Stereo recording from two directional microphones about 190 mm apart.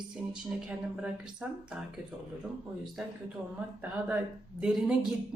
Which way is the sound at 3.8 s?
10° right (ahead or behind).